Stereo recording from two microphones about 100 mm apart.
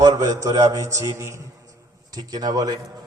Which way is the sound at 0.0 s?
40° right (ahead or behind).